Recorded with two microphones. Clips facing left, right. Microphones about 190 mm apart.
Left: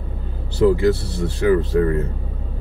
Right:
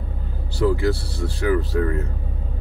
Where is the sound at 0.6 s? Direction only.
20° left (ahead or behind).